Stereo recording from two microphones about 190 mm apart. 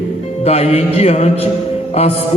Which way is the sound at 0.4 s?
30° left (ahead or behind).